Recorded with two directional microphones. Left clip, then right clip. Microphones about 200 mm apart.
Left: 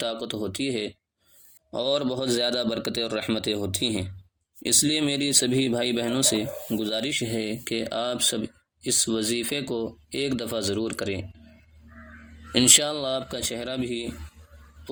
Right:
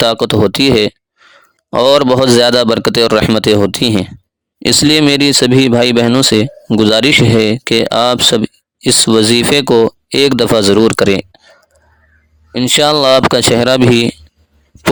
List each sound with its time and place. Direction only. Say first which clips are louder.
0.0 s speech: right 19 dB; 45° right (ahead or behind)
12.5 s speech: right 11 dB; 35° right (ahead or behind)